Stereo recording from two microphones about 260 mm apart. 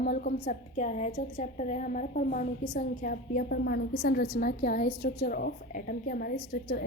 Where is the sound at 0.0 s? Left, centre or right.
Left.